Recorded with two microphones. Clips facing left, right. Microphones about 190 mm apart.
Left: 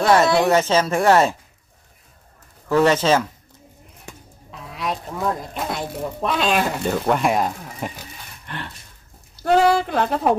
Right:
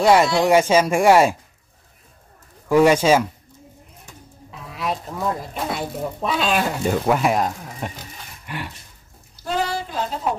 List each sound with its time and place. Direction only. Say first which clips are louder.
0.0 s speech: even; 10° right (ahead or behind)
2.7 s speech: right 2 dB; 10° right (ahead or behind)
4.5 s a sound: right 1 dB; centre (ahead or behind)
6.2 s speech: left 1 dB; centre (ahead or behind)
8.5 s speech: right 2 dB; 10° right (ahead or behind)
9.4 s a woman's voice: left 8 dB; 65° left (ahead or behind)